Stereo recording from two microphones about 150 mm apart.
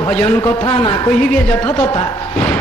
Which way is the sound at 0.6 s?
35° left (ahead or behind).